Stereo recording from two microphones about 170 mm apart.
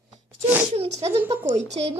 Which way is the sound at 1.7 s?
40° right (ahead or behind).